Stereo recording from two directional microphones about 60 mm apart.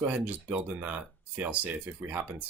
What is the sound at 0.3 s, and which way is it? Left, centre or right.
Speech, right.